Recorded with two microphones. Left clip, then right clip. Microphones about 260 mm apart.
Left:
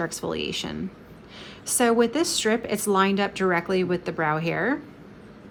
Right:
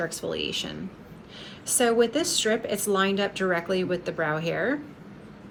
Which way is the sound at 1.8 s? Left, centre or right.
Centre.